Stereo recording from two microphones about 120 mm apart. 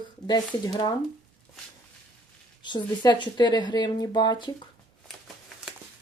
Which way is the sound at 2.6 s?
40° left (ahead or behind).